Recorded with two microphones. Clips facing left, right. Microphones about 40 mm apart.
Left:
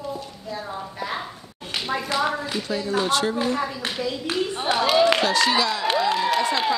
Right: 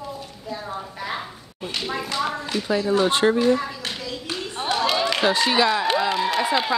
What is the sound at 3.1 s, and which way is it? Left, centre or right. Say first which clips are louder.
Speech: right 3 dB; right.